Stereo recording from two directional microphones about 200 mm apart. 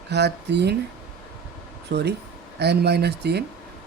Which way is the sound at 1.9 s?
55° right (ahead or behind).